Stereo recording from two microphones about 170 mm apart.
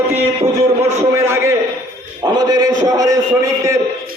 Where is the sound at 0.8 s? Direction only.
15° right (ahead or behind).